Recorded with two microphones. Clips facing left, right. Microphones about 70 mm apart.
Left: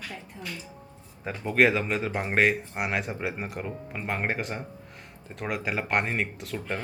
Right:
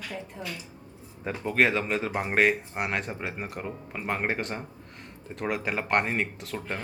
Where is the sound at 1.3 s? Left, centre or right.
Centre.